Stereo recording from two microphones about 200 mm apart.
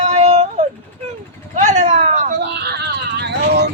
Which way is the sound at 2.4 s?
55° right (ahead or behind).